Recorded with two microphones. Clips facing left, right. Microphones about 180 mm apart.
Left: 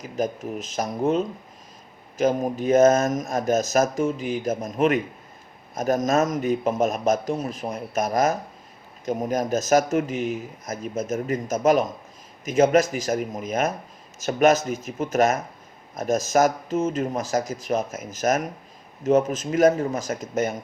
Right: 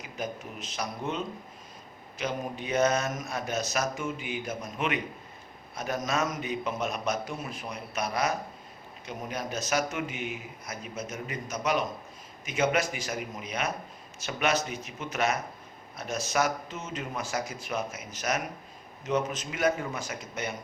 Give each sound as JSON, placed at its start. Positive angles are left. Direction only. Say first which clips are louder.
{"t": 0.0, "sound": "speech", "louder": "left 9 dB", "side_deg": 40}